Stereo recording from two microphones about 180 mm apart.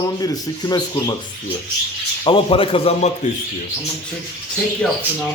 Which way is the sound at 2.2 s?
30° left (ahead or behind).